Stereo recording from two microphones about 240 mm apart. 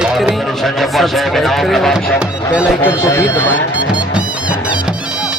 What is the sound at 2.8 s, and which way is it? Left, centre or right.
Speech, centre.